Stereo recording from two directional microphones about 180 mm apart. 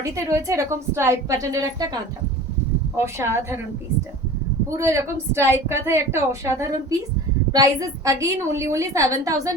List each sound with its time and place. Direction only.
0.0 s a woman's voice: 15° right (ahead or behind)
4.8 s a woman's voice: 15° right (ahead or behind)